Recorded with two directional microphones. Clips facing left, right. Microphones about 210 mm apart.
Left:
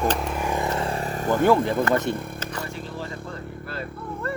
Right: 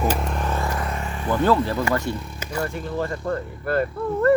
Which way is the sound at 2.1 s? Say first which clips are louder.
Left 1 dB; 55° left (ahead or behind).